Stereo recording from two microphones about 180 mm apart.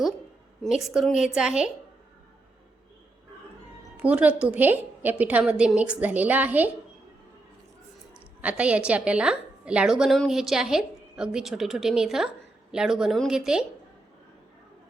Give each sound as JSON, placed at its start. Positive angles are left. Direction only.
{"t": 0.6, "sound": "a woman's voice", "side_deg": 0}
{"t": 3.9, "sound": "a woman's voice", "side_deg": -10}
{"t": 8.1, "sound": "a woman's voice", "side_deg": -5}